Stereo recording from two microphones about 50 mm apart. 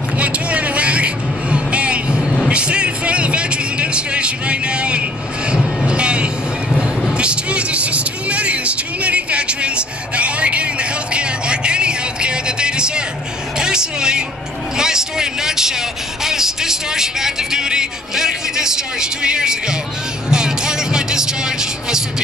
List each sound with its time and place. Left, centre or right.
0.2 s music: right
7.2 s vehicle: right
14.8 s a sound: centre
20.2 s music: centre